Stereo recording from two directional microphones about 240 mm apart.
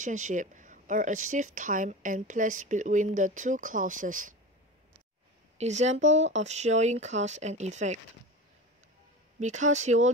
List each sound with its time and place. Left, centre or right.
0.0 s speech: right
5.6 s speech: right
9.4 s speech: right